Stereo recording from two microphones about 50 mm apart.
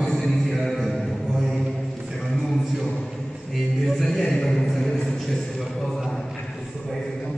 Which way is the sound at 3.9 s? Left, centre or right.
Centre.